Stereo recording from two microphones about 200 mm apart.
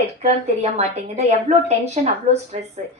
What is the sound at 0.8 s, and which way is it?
A woman's voice, 35° right (ahead or behind).